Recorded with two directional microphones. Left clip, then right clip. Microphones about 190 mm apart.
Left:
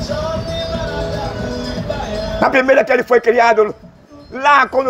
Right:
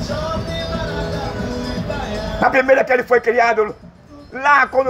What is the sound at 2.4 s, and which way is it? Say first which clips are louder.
Music: left 1 dB; 50° left (ahead or behind).